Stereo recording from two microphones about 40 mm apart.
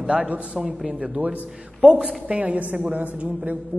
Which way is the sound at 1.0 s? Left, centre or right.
Right.